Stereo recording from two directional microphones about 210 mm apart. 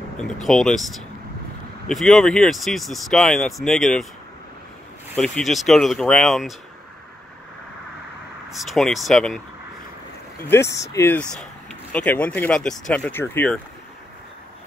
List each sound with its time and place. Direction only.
0.2 s speech: centre (ahead or behind)
5.1 s speech: 5° left (ahead or behind)
8.5 s speech: centre (ahead or behind)
10.4 s speech: 10° left (ahead or behind)